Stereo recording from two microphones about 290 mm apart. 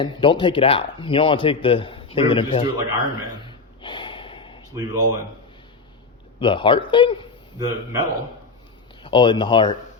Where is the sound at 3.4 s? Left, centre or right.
Centre.